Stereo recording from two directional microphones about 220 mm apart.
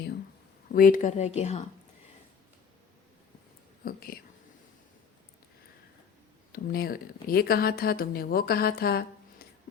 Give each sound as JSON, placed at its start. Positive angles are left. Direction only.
{"t": 0.7, "sound": "a woman's voice", "side_deg": 40}
{"t": 3.8, "sound": "a woman's voice", "side_deg": 40}
{"t": 6.5, "sound": "speech", "side_deg": 40}